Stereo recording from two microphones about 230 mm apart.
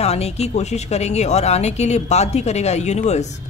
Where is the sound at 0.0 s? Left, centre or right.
Left.